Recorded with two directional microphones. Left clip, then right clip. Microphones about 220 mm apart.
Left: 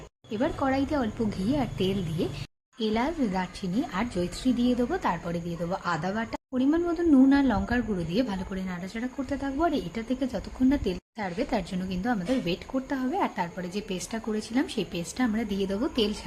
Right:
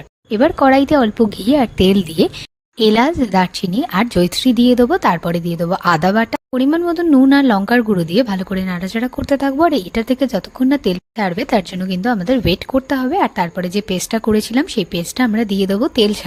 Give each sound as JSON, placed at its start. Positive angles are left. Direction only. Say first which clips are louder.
{"t": 0.3, "sound": "speech", "louder": "right 16 dB", "side_deg": -40}